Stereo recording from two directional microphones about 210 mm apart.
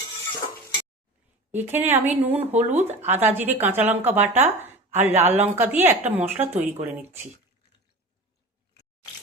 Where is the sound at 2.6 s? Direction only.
30° right (ahead or behind).